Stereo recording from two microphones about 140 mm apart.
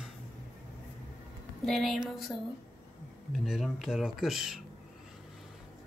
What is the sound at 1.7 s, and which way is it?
Speech, centre (ahead or behind).